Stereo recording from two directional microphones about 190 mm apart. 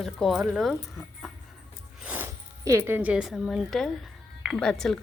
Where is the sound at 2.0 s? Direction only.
10° right (ahead or behind).